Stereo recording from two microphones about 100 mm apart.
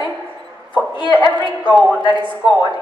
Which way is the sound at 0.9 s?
50° left (ahead or behind).